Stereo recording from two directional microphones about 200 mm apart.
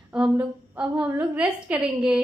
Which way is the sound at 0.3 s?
5° right (ahead or behind).